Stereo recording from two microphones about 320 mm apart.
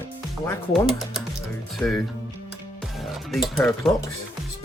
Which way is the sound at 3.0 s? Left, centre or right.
Centre.